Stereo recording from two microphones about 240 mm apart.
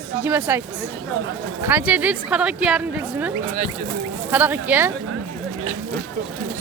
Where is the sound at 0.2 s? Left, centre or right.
Centre.